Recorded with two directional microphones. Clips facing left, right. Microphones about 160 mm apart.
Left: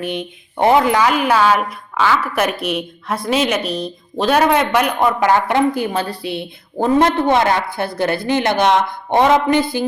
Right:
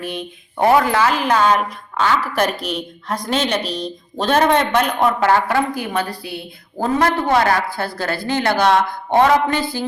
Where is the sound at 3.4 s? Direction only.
35° right (ahead or behind).